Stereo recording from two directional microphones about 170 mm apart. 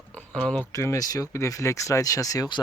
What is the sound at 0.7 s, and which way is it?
Speech, 20° left (ahead or behind).